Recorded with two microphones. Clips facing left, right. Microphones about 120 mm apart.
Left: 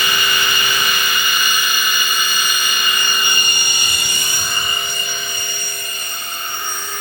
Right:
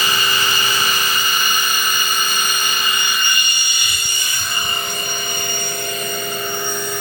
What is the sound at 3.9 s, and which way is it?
Aircraft, 70° left (ahead or behind).